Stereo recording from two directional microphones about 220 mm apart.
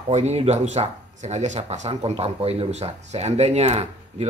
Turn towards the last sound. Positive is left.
turn(degrees=-30)  # may be behind; listen again after turning